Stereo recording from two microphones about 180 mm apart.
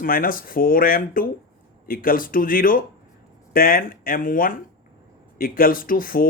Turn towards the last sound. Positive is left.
turn(degrees=50)  # may be behind; listen again after turning